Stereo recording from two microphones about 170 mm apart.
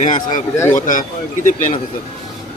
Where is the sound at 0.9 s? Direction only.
50° left (ahead or behind).